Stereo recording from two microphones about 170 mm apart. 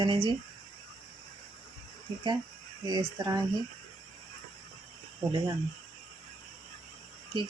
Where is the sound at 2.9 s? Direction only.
25° right (ahead or behind).